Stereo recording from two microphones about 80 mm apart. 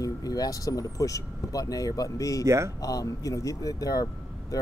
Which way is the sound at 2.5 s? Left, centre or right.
Right.